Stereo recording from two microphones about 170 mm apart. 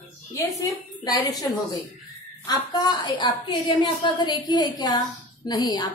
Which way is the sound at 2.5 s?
25° left (ahead or behind).